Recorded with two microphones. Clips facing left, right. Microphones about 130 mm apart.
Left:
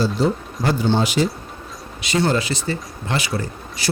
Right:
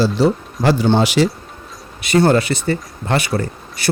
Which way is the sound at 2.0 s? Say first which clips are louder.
Right 6 dB; 55° right (ahead or behind).